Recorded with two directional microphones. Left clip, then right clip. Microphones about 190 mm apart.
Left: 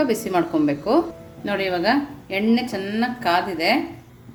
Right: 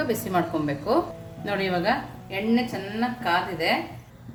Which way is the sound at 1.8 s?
50° left (ahead or behind).